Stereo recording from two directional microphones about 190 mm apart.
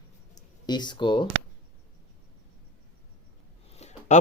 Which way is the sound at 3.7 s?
35° left (ahead or behind).